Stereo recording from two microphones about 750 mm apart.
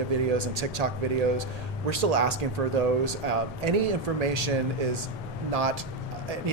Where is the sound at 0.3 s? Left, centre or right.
Right.